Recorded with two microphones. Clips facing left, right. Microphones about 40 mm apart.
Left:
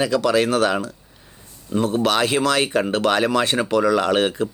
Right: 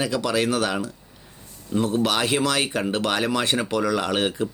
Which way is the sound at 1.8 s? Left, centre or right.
Left.